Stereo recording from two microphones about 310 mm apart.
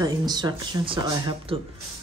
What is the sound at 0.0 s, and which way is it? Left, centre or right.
Speech, centre.